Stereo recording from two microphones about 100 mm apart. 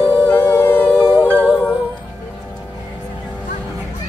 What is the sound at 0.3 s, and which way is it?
Howl, 20° left (ahead or behind).